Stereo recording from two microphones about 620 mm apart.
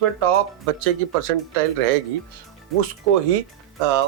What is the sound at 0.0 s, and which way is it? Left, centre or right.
Speech, right.